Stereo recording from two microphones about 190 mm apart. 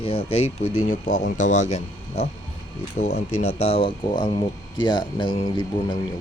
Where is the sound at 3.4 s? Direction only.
30° left (ahead or behind).